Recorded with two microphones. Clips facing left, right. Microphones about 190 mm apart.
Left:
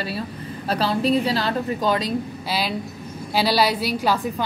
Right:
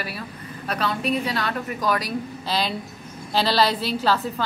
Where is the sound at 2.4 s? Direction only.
5° left (ahead or behind).